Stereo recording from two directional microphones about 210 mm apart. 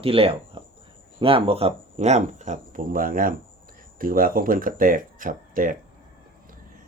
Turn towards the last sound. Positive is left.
turn(degrees=-40)  # may be behind; listen again after turning